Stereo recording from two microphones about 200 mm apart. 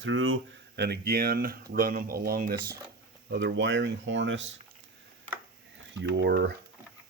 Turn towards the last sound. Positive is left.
turn(degrees=-60)  # may be behind; listen again after turning